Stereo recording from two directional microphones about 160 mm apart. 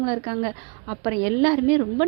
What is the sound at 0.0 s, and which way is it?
A woman's voice, 30° right (ahead or behind).